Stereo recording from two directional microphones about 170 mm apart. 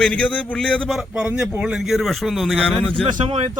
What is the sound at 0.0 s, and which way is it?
A man's voice, 5° left (ahead or behind).